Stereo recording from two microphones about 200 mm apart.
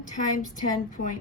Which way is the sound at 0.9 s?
45° left (ahead or behind).